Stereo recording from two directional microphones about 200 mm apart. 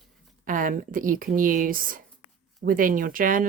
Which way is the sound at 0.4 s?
40° right (ahead or behind).